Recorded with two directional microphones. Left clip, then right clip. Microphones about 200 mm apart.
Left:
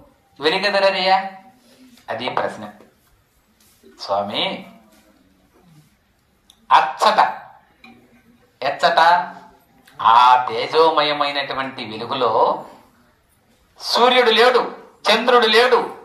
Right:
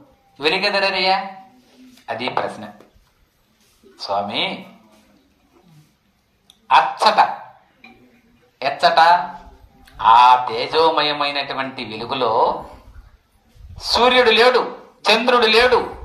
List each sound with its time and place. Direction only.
0.4 s speech: 15° right (ahead or behind)
3.9 s speech: 15° right (ahead or behind)
6.4 s a sound: 15° right (ahead or behind)
8.5 s speech: 15° right (ahead or behind)
13.7 s speech: 15° right (ahead or behind)